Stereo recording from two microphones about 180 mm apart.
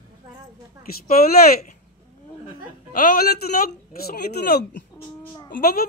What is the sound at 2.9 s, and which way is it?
Speech, 50° left (ahead or behind).